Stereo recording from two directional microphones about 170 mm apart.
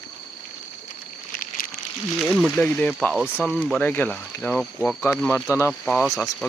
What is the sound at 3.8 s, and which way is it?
Speech, 10° left (ahead or behind).